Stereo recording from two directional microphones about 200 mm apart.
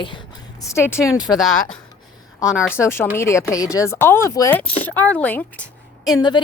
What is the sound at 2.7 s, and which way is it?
Speech, 10° left (ahead or behind).